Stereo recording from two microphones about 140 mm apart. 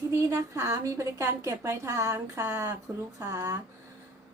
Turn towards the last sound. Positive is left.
turn(degrees=-20)  # may be behind; listen again after turning